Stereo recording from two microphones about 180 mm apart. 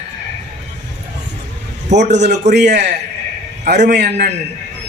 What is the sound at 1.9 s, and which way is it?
Speech, 40° right (ahead or behind).